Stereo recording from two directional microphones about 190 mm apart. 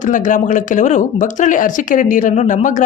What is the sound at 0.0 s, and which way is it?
Speech, 40° left (ahead or behind).